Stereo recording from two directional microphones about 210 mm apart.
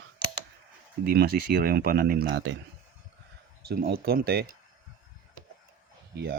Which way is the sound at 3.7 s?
45° right (ahead or behind).